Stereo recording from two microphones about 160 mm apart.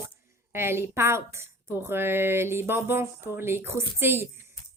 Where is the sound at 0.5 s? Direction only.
15° right (ahead or behind).